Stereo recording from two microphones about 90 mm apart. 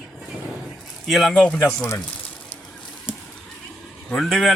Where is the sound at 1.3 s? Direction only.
10° left (ahead or behind).